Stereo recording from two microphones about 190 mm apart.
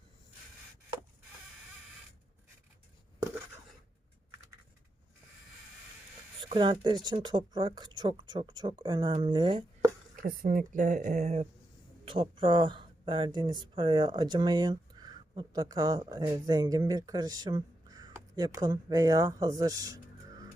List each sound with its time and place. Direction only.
6.4 s speech: 25° right (ahead or behind)
10.2 s speech: 50° right (ahead or behind); by 20.0 s 20° right (ahead or behind)